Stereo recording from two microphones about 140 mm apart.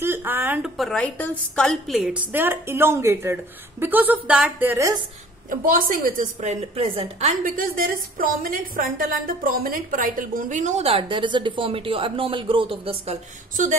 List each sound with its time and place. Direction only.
0.0 s speech: 15° right (ahead or behind)
0.7 s a woman's voice: 5° left (ahead or behind); by 4.9 s 15° right (ahead or behind)
5.5 s a woman's voice: 85° right; by 13.2 s 45° right (ahead or behind)